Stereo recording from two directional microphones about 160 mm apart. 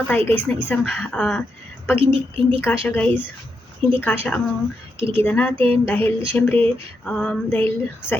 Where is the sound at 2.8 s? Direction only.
10° left (ahead or behind).